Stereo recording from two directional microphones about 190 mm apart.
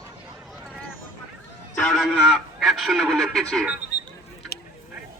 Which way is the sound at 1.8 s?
Centre (ahead or behind).